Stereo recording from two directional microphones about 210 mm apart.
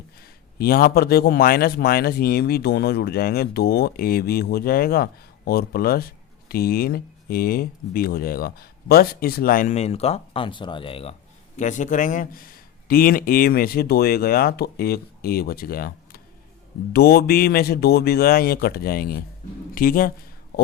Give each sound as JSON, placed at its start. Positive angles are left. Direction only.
{"t": 0.2, "sound": "speech", "side_deg": 45}